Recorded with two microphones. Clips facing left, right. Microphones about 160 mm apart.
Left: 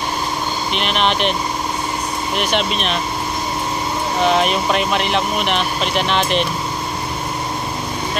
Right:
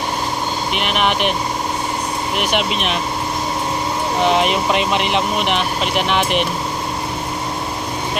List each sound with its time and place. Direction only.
0.7 s speech: 10° right (ahead or behind)
2.3 s speech: 15° right (ahead or behind)
4.3 s speech: 20° right (ahead or behind)